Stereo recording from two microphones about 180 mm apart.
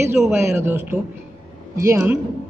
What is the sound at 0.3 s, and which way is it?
A woman's voice, 15° right (ahead or behind).